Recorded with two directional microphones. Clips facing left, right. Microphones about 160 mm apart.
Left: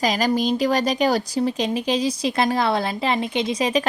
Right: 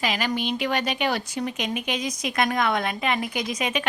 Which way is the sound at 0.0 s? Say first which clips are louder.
Left 6 dB; 40° left (ahead or behind).